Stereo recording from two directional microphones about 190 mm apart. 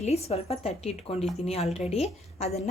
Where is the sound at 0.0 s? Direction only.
35° left (ahead or behind).